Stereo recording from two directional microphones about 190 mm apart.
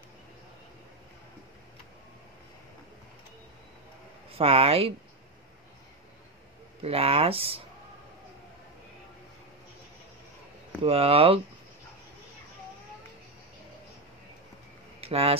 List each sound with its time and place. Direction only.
4.3 s speech: 30° right (ahead or behind)
6.8 s speech: 30° right (ahead or behind)
10.8 s speech: 30° right (ahead or behind)
15.0 s a sound: 30° right (ahead or behind)